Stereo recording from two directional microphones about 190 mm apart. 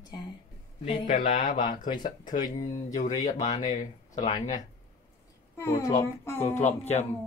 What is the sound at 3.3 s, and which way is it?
Speech, 35° left (ahead or behind).